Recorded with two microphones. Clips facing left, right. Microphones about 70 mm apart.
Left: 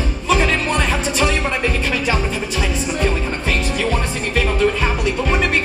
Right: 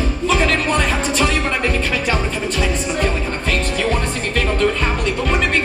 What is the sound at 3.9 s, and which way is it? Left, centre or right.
Music, centre.